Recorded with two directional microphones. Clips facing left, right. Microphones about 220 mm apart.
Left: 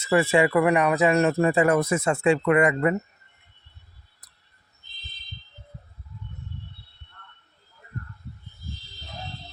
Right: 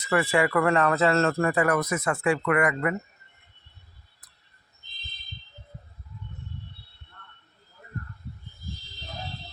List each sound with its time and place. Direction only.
0.0 s speech: 25° left (ahead or behind)